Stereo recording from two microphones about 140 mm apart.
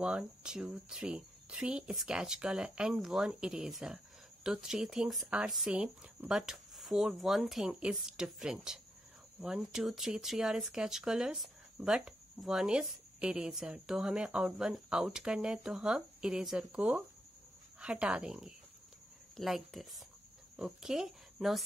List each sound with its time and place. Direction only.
0.0 s speech: 5° right (ahead or behind)